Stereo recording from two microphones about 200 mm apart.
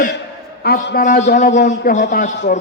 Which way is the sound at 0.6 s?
50° left (ahead or behind).